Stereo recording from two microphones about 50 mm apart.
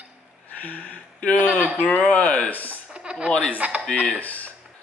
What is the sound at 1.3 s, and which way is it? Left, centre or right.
Speech, right.